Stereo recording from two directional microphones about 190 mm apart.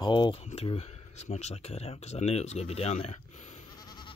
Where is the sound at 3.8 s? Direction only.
20° left (ahead or behind).